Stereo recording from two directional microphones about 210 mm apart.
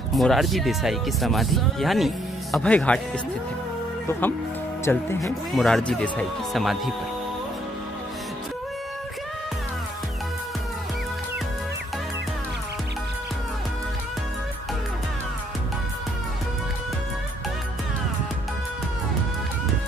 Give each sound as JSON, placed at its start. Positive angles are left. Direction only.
{"t": 0.1, "sound": "speech", "side_deg": 0}
{"t": 4.9, "sound": "speech", "side_deg": 10}